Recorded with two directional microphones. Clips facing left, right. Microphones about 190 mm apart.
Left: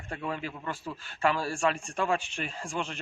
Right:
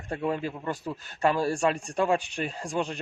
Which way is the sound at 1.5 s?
35° right (ahead or behind).